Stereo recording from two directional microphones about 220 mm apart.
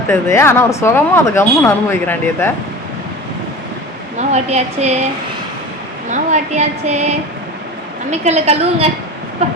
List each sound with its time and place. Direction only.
0.1 s speech: 10° left (ahead or behind)
4.2 s a woman's voice: 30° right (ahead or behind)
6.1 s a sound: 35° right (ahead or behind)
8.2 s a woman's voice: 30° right (ahead or behind)